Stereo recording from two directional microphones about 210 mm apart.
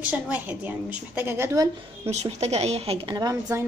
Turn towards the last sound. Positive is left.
turn(degrees=-15)  # may be behind; listen again after turning